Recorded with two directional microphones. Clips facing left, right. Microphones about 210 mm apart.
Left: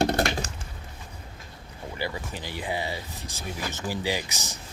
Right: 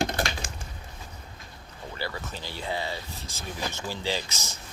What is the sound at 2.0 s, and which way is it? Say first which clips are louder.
Speech: left 2 dB; 15° left (ahead or behind).